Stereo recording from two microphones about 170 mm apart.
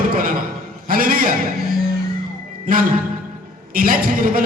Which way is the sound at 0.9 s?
55° right (ahead or behind).